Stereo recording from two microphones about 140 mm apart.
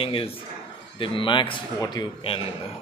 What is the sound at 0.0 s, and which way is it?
A man's voice, 40° left (ahead or behind).